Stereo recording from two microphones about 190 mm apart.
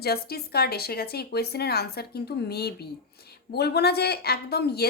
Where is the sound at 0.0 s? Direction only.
55° left (ahead or behind).